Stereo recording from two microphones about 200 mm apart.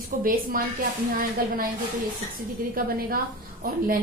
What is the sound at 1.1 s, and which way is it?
Speech, 45° right (ahead or behind).